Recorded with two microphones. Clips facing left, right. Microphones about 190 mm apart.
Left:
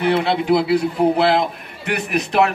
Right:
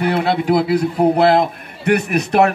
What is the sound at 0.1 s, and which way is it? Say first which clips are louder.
A man's voice: left 1 dB; 50° right (ahead or behind).